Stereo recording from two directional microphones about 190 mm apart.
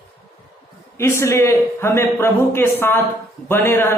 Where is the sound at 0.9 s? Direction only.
15° left (ahead or behind).